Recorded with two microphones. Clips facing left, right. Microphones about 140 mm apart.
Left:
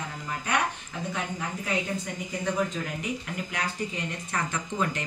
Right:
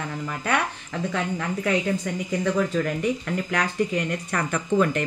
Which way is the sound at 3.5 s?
75° right (ahead or behind).